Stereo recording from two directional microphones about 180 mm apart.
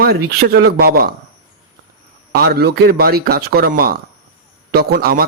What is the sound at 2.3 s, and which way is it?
A man's voice, 60° right (ahead or behind).